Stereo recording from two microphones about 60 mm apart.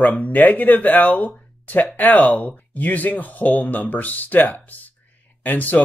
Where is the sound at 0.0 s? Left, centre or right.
Left.